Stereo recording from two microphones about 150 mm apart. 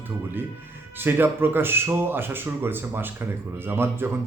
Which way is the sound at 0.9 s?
15° right (ahead or behind).